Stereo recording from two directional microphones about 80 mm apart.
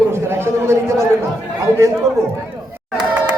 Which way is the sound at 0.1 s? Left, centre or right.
Right.